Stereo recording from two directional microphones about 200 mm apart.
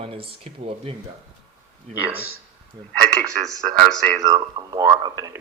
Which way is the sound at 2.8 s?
20° right (ahead or behind).